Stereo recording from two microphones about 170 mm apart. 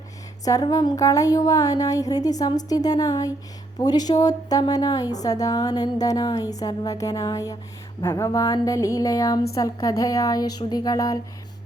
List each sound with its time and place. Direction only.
0.4 s a woman's voice: 20° left (ahead or behind)